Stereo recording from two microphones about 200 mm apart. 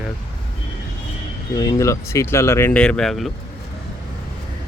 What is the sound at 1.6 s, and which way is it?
Speech, 15° left (ahead or behind).